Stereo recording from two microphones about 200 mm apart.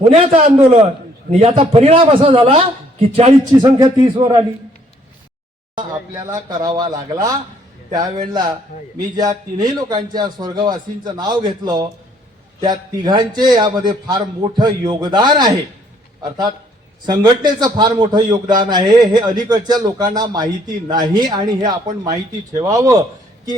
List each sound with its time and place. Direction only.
0.1 s a man's voice: 30° right (ahead or behind)
5.7 s speech: 20° right (ahead or behind)
17.1 s speech: 20° right (ahead or behind)